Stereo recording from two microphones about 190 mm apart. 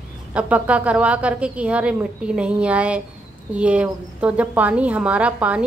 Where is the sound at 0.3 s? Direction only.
5° right (ahead or behind).